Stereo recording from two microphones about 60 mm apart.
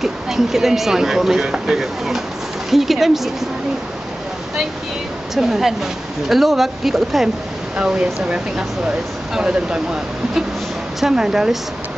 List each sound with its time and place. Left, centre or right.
0.0 s speech: centre
5.3 s speech: centre
7.7 s speech: centre
11.0 s speech: centre